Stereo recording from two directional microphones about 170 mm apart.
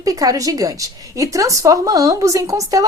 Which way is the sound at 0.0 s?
20° right (ahead or behind).